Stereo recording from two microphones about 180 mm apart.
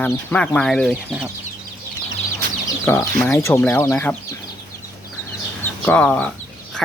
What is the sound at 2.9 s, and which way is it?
Speech, 15° left (ahead or behind).